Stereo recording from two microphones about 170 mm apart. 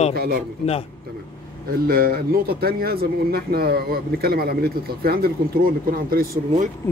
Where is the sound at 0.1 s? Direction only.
65° right (ahead or behind).